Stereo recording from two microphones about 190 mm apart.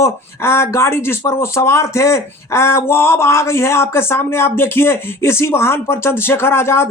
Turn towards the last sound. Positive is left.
turn(degrees=15)  # may be behind; listen again after turning